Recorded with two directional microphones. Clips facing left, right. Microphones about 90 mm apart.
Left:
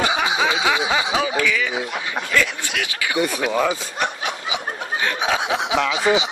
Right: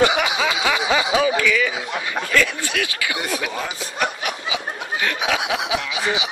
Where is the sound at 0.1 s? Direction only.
25° left (ahead or behind).